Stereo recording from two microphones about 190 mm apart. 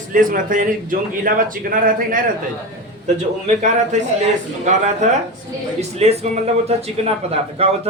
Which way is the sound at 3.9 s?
40° right (ahead or behind).